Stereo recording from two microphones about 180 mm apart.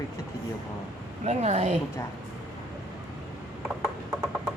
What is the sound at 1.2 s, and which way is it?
Speech, 40° right (ahead or behind).